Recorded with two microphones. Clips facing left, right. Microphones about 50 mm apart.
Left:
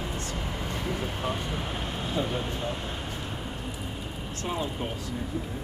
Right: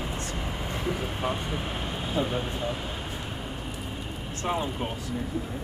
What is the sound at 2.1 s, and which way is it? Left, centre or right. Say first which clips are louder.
Speech: right 2 dB; centre.